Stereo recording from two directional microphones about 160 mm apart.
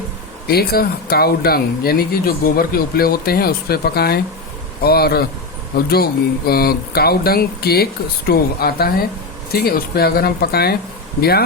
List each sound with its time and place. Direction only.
0.4 s speech: 75° left (ahead or behind)